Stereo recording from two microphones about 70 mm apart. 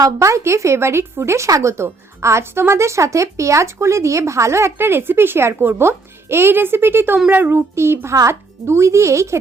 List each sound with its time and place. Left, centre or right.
0.0 s speech: right